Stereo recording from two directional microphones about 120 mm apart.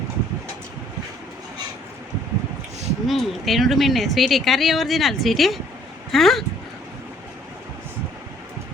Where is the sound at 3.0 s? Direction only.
Centre (ahead or behind).